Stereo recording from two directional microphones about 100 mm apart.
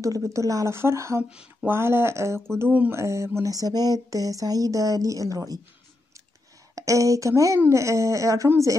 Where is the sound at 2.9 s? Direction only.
30° right (ahead or behind).